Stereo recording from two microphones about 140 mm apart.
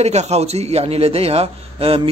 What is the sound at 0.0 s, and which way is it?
Speech, 50° right (ahead or behind).